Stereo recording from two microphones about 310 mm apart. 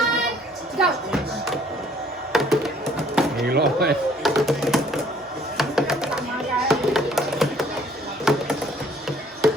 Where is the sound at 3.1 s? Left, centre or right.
Centre.